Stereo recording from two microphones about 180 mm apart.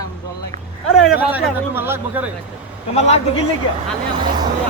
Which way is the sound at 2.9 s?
35° left (ahead or behind).